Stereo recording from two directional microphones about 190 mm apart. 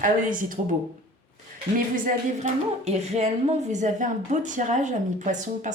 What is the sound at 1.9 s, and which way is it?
A woman's voice, 40° right (ahead or behind).